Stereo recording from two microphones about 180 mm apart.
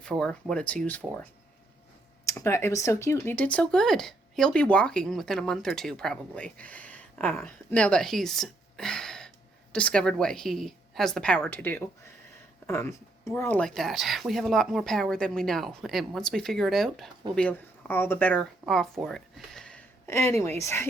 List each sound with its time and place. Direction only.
0.0 s speech: 5° left (ahead or behind)
20.1 s speech: 15° left (ahead or behind)